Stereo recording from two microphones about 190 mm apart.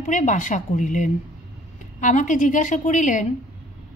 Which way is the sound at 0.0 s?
40° left (ahead or behind).